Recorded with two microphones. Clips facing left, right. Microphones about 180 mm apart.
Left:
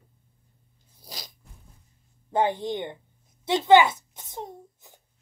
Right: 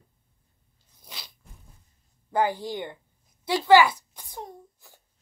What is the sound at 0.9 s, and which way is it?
Zipper, 40° left (ahead or behind).